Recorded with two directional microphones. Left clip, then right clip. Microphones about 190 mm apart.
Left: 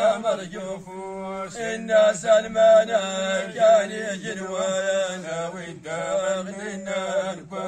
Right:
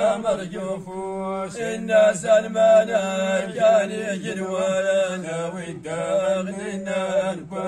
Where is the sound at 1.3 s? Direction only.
40° right (ahead or behind).